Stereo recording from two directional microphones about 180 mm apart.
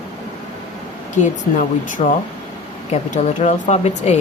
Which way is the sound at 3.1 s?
45° left (ahead or behind).